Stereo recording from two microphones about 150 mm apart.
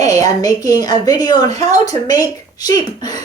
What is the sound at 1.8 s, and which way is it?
Speech, 25° left (ahead or behind).